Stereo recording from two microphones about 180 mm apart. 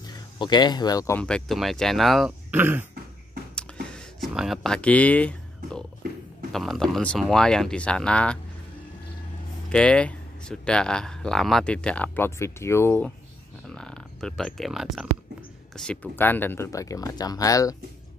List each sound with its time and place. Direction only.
0.0 s speech: 25° left (ahead or behind)
1.2 s speech: 5° left (ahead or behind)
2.5 s throat clearing: 10° right (ahead or behind)
3.9 s a sound: 5° left (ahead or behind)
4.3 s speech: centre (ahead or behind)
9.7 s speech: 5° left (ahead or behind)